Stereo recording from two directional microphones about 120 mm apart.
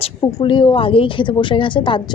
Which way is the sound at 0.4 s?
40° left (ahead or behind).